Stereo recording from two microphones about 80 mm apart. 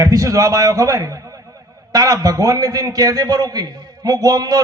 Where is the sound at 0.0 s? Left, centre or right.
Right.